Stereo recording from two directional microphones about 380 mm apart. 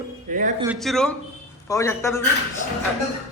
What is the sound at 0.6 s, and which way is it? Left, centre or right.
A man's voice, centre.